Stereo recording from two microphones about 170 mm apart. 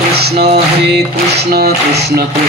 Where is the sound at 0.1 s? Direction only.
70° right (ahead or behind).